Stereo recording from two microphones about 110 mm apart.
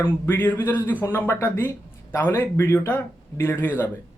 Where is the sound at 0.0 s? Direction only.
20° left (ahead or behind).